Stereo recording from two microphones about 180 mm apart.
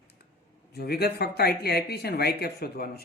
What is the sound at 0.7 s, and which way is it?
Speech, 60° left (ahead or behind).